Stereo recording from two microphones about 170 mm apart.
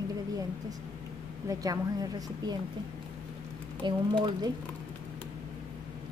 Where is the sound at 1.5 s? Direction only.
20° right (ahead or behind).